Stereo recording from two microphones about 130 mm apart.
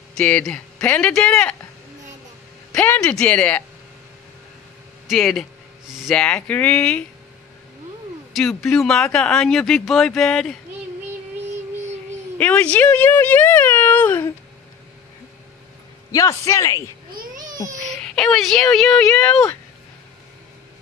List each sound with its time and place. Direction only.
0.1 s speech: 5° left (ahead or behind)
2.7 s speech: 10° left (ahead or behind)
5.0 s speech: centre (ahead or behind)
8.4 s speech: centre (ahead or behind)
12.4 s speech: 10° left (ahead or behind)
16.1 s a man's voice: 25° left (ahead or behind)
17.8 s speech: 5° left (ahead or behind)